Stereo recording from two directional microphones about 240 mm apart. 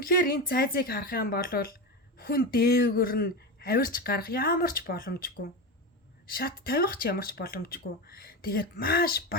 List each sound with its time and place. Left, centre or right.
0.0 s speech: left